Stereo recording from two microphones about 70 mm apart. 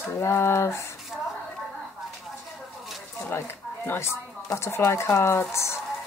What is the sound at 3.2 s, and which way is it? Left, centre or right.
Speech, left.